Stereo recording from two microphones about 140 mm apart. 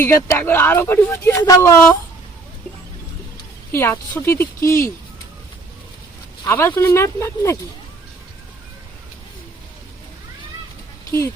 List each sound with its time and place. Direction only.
0.0 s speech: 20° left (ahead or behind)
3.7 s speech: 15° left (ahead or behind)
6.4 s speech: 15° left (ahead or behind)